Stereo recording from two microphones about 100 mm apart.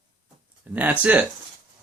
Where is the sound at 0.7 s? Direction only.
15° right (ahead or behind).